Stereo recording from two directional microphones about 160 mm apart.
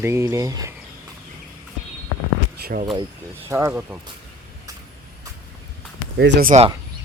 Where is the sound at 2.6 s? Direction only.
60° right (ahead or behind).